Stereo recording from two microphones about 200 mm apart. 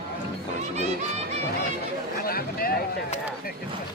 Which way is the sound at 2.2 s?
45° left (ahead or behind).